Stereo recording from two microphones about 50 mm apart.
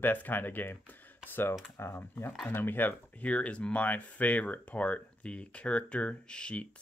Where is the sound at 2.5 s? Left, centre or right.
Left.